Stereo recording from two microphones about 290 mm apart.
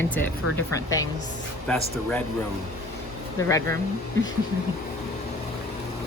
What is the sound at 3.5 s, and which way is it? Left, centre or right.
Speech, centre.